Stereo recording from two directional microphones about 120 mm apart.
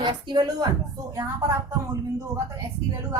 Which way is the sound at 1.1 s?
25° right (ahead or behind).